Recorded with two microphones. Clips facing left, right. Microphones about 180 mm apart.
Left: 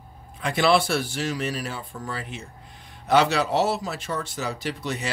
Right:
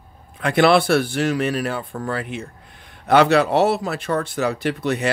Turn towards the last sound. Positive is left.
turn(degrees=-60)  # may be behind; listen again after turning